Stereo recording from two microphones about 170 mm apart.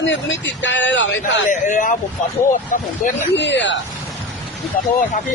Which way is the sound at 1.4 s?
50° left (ahead or behind).